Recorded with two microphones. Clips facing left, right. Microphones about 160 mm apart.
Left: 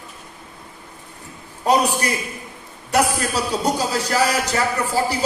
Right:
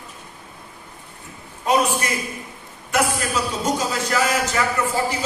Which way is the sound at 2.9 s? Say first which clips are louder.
Left 2 dB; 35° left (ahead or behind).